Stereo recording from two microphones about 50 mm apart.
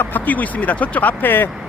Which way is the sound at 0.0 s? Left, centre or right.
Left.